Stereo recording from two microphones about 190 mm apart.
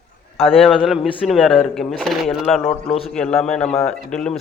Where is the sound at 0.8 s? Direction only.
Centre (ahead or behind).